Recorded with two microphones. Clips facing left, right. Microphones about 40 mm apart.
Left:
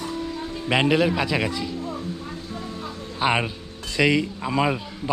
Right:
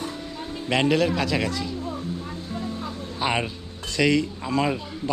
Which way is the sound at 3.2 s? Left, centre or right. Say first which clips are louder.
Left 3 dB; centre.